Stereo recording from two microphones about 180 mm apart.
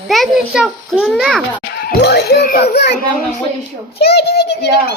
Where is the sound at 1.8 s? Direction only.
65° left (ahead or behind).